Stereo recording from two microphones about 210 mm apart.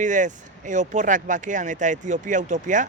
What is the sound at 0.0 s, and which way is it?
Speech, 35° right (ahead or behind).